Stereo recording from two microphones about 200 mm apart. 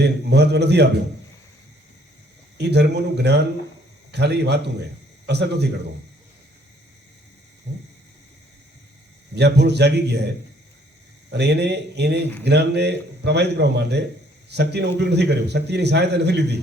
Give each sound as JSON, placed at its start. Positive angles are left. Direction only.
{"t": 0.0, "sound": "a man's voice", "side_deg": -55}
{"t": 2.6, "sound": "a man's voice", "side_deg": -55}
{"t": 7.7, "sound": "a man's voice", "side_deg": -60}
{"t": 9.3, "sound": "a man's voice", "side_deg": -55}
{"t": 11.3, "sound": "a man's voice", "side_deg": -55}